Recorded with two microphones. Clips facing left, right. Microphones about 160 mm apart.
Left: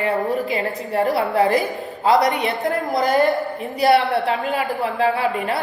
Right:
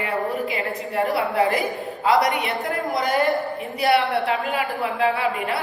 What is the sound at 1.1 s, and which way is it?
A woman's voice, 40° left (ahead or behind).